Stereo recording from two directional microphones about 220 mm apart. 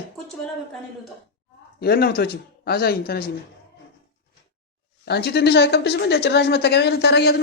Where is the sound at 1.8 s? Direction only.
45° left (ahead or behind).